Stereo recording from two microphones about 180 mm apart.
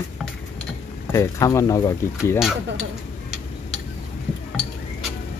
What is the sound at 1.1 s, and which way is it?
Speech, 15° left (ahead or behind).